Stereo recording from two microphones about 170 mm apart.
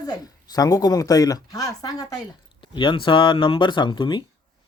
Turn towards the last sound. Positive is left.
turn(degrees=30)  # may be behind; listen again after turning